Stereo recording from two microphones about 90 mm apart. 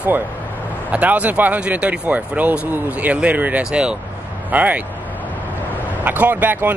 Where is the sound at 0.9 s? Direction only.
15° right (ahead or behind).